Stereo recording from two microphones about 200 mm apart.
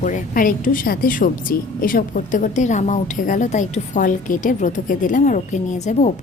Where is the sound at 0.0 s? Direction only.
40° left (ahead or behind).